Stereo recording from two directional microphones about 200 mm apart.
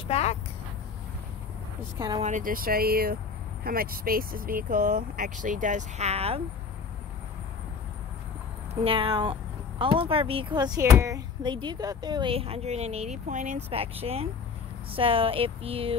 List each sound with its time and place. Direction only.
0.1 s speech: 35° left (ahead or behind)
2.0 s speech: 20° right (ahead or behind)
2.2 s speech: 40° right (ahead or behind)
8.8 s speech: 25° right (ahead or behind)